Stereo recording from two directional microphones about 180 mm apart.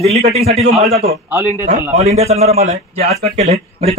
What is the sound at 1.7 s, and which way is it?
A man's voice, 40° right (ahead or behind).